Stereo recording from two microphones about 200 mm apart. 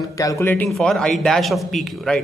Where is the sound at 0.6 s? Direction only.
Centre (ahead or behind).